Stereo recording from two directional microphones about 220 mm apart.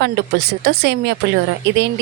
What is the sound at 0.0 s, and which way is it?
Speech, 45° right (ahead or behind).